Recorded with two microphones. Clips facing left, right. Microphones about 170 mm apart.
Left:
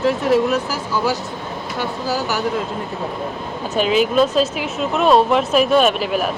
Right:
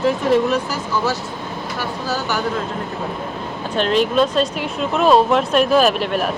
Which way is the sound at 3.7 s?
5° left (ahead or behind).